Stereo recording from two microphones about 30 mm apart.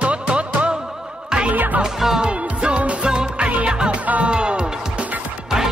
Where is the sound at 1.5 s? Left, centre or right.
Right.